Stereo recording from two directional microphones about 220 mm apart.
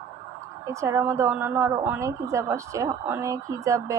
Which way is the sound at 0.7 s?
15° right (ahead or behind).